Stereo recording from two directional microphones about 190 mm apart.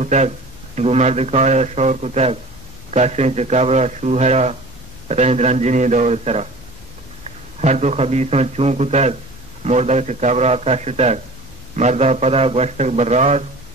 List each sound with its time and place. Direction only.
0.0 s a man's voice: 40° right (ahead or behind)
7.6 s a man's voice: 35° right (ahead or behind)